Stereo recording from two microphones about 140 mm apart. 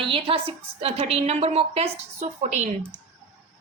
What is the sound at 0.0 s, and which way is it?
A woman's voice, 40° right (ahead or behind).